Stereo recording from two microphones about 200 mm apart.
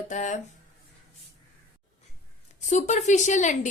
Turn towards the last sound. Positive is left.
turn(degrees=40)  # may be behind; listen again after turning